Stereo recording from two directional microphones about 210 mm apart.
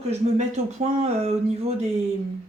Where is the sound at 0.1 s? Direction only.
30° right (ahead or behind).